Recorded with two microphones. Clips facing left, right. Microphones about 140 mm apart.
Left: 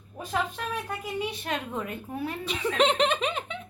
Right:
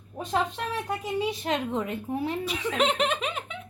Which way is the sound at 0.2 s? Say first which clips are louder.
Right 3 dB; 20° right (ahead or behind).